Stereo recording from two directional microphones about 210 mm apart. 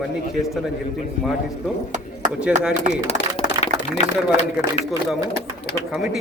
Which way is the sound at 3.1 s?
30° left (ahead or behind).